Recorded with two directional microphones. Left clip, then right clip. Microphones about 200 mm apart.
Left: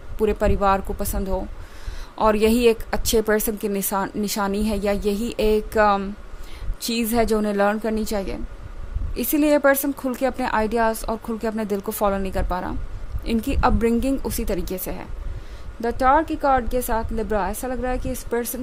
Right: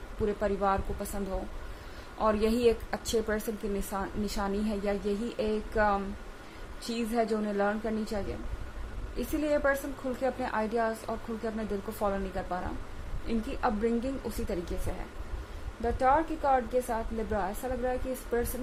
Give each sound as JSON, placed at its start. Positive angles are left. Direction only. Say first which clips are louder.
{"t": 0.3, "sound": "a woman's voice", "louder": "left 9 dB", "side_deg": 50}
{"t": 15.8, "sound": "a woman's voice", "louder": "left 8 dB", "side_deg": 55}